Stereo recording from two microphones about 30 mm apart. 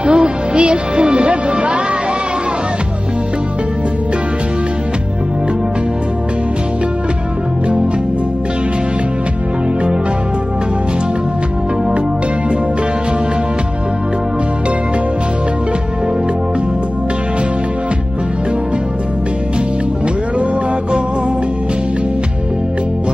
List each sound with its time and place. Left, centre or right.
0.0 s speech: right